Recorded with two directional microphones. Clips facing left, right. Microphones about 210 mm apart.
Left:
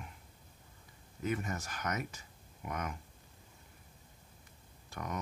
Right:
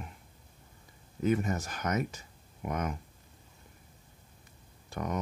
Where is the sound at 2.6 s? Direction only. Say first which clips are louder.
Right 6 dB; 35° right (ahead or behind).